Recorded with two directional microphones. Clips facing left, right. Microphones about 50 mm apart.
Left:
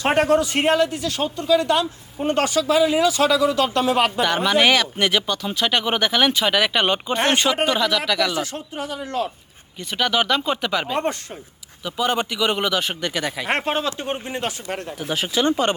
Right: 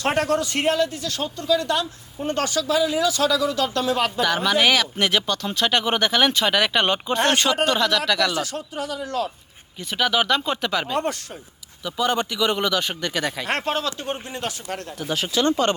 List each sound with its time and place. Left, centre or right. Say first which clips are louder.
0.0 s speech: left 4 dB; left
4.2 s speech: left 2 dB; centre
7.2 s speech: even; centre
8.3 s speech: left 1 dB; left
9.9 s speech: even; centre
10.9 s speech: left 1 dB; left
11.8 s speech: left 1 dB; centre
13.5 s speech: left 4 dB; left
15.1 s speech: left 1 dB; centre